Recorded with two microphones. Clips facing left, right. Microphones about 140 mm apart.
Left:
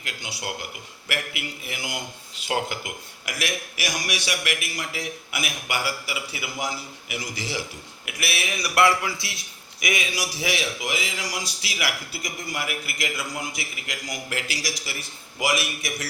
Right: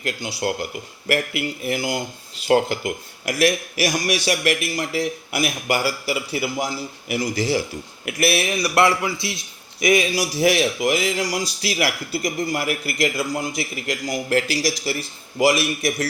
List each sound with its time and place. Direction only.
0.0 s a man's voice: 40° right (ahead or behind)
8.6 s a man's voice: 25° right (ahead or behind)
9.8 s speech: 35° right (ahead or behind)